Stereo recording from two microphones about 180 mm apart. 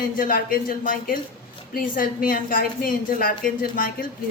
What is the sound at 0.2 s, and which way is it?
A woman's voice, 50° left (ahead or behind).